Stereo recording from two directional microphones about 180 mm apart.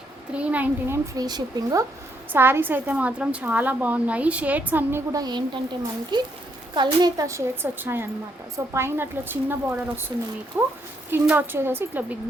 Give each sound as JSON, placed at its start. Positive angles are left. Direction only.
{"t": 0.3, "sound": "a woman's voice", "side_deg": -10}
{"t": 1.1, "sound": "a woman's voice", "side_deg": -20}